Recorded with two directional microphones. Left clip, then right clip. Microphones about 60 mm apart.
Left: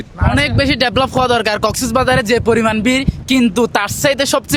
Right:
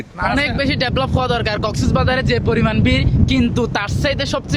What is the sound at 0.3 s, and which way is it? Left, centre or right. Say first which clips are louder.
Speech: left 7 dB; left.